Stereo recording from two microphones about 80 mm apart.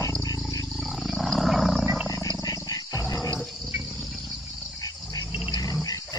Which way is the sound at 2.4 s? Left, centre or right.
Left.